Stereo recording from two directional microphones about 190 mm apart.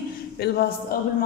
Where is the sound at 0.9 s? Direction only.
50° left (ahead or behind).